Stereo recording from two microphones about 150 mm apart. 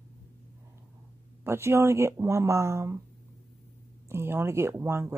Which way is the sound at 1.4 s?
15° right (ahead or behind).